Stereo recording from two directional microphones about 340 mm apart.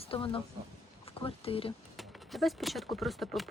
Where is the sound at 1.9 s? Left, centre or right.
Centre.